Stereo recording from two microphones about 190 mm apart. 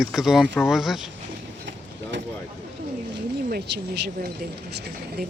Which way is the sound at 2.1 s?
70° right (ahead or behind).